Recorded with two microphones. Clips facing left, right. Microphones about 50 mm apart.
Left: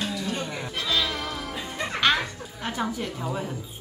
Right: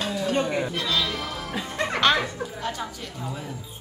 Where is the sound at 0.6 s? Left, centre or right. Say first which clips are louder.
Right 1 dB; centre.